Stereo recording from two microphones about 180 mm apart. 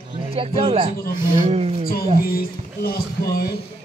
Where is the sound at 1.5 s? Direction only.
35° right (ahead or behind).